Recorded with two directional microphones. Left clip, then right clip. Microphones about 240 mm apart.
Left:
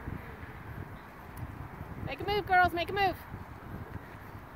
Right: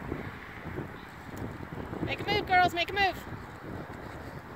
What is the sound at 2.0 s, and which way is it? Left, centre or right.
Speech, centre.